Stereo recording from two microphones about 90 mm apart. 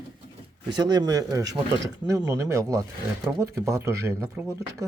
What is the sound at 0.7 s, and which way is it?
Speech, 50° right (ahead or behind).